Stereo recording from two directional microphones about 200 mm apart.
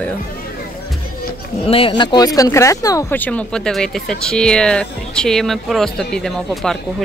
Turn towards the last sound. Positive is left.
turn(degrees=0)  # may be behind; listen again after turning